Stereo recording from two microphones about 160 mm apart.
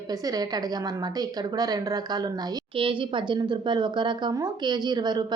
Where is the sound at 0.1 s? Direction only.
25° right (ahead or behind).